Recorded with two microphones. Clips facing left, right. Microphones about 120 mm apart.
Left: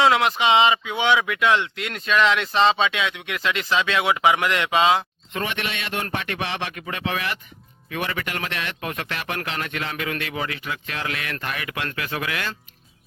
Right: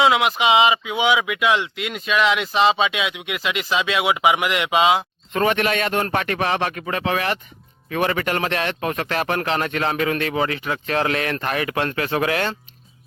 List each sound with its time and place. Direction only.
0.0 s speech: 5° right (ahead or behind)
5.3 s a man's voice: 45° right (ahead or behind)